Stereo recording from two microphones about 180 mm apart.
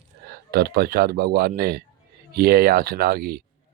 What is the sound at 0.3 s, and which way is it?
Speech, 60° right (ahead or behind).